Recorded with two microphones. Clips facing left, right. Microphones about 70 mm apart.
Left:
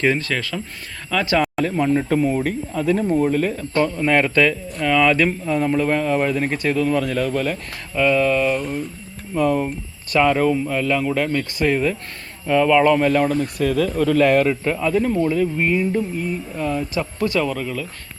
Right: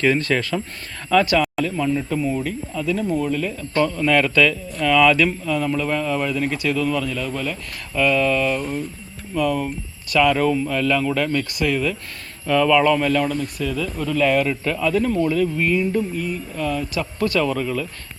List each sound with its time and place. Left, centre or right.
0.2 s speech: centre
1.6 s speech: left
3.8 s speech: centre
7.0 s speech: left
7.9 s speech: centre
9.3 s speech: left
10.3 s speech: centre; by 14.4 s left
14.4 s speech: left
17.4 s speech: centre